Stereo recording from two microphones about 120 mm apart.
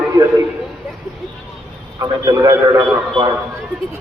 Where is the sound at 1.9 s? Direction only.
30° right (ahead or behind).